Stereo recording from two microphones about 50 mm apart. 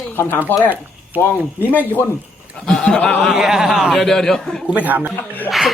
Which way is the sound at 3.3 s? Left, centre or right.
Centre.